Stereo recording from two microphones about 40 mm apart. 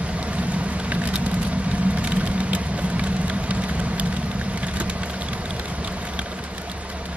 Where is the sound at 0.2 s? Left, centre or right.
Right.